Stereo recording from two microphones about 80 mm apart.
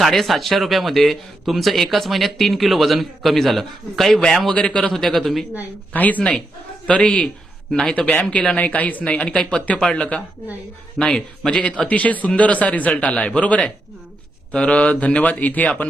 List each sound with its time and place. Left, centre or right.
0.0 s speech: centre
5.9 s speech: centre